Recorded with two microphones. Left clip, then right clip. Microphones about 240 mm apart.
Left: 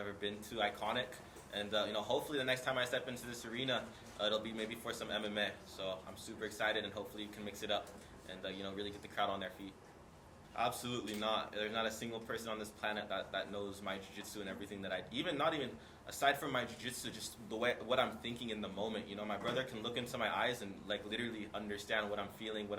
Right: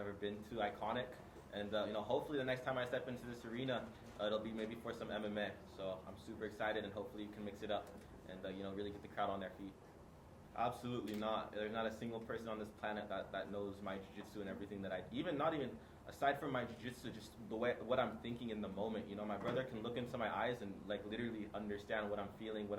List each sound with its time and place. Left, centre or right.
0.0 s speech: centre
2.0 s a man's voice: right
2.3 s speech: centre
10.5 s speech: centre